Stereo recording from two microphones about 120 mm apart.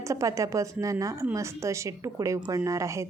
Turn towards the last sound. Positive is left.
turn(degrees=-25)  # may be behind; listen again after turning